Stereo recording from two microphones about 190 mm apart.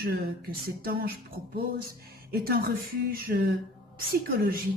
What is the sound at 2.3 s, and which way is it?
A woman's voice, 55° right (ahead or behind).